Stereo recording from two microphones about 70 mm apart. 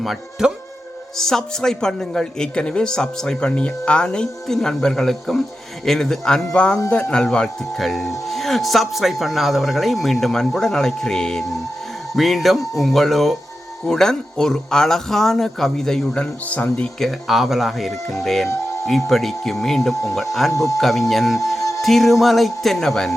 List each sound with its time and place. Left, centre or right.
0.0 s a man's voice: centre
16.5 s speech: left
17.0 s speech: centre